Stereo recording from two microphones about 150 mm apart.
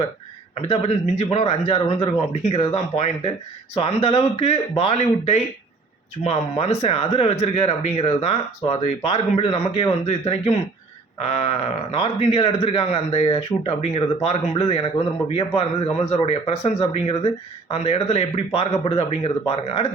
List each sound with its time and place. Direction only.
0.5 s a man's voice: 45° left (ahead or behind)